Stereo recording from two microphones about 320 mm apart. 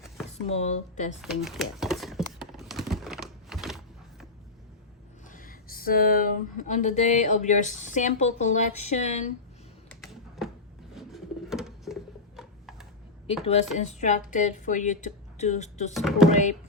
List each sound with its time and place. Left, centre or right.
0.4 s speech: left
1.2 s typing: centre
5.3 s speech: left
10.0 s typing: centre
10.9 s a sound: centre
13.4 s speech: centre
15.9 s speech: centre
16.3 s speech: left